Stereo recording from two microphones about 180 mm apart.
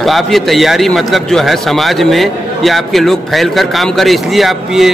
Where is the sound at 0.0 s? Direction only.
Centre (ahead or behind).